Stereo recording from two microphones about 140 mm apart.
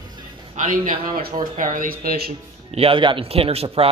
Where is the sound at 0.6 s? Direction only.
75° right (ahead or behind); by 2.3 s 90° right.